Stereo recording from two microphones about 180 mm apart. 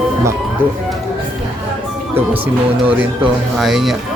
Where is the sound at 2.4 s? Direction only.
10° right (ahead or behind).